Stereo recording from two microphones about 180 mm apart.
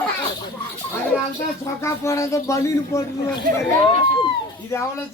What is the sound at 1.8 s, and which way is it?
Speech, 15° left (ahead or behind).